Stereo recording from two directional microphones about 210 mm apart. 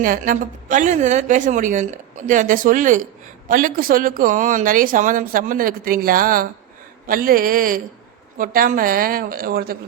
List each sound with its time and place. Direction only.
0.0 s a woman's voice: 40° right (ahead or behind)